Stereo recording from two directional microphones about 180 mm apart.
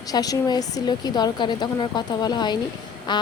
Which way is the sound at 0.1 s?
20° left (ahead or behind).